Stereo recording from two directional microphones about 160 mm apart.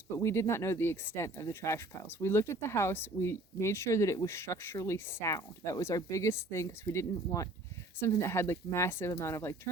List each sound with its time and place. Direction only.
0.2 s speech: 15° left (ahead or behind)